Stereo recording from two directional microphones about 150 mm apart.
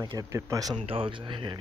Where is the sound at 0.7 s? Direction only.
35° right (ahead or behind).